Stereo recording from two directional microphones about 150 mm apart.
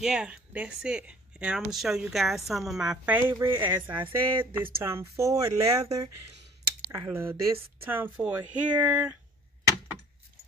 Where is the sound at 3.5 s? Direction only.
35° right (ahead or behind).